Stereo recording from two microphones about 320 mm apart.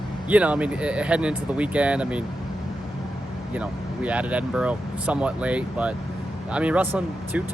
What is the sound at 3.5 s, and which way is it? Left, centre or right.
Speech, centre.